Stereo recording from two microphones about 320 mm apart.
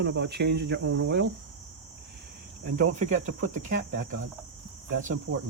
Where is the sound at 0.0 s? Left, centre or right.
Right.